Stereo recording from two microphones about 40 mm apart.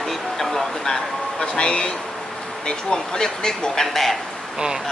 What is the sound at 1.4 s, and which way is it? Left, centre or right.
Speech, left.